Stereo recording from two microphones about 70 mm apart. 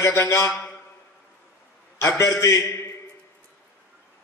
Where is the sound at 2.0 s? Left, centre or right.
Left.